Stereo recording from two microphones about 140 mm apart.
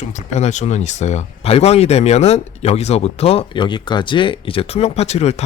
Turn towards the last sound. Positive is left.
turn(degrees=50)  # may be behind; listen again after turning